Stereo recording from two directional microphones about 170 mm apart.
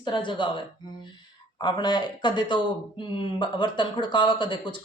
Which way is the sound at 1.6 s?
25° left (ahead or behind).